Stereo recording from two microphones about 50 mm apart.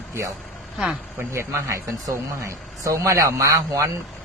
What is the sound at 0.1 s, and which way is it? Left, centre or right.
A man's voice, right.